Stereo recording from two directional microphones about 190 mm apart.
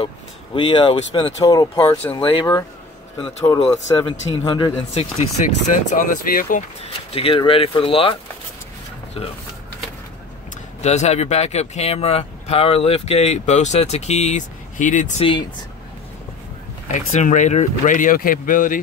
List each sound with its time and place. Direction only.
0.6 s speech: 25° left (ahead or behind)
2.1 s speech: 30° left (ahead or behind)
3.4 s speech: 15° left (ahead or behind)
4.9 s speech: 35° left (ahead or behind)
7.1 s speech: 30° left (ahead or behind)
10.8 s speech: 35° left (ahead or behind)
16.8 s speech: 40° left (ahead or behind)